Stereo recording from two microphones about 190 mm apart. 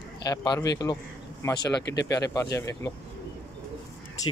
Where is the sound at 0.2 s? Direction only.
20° left (ahead or behind).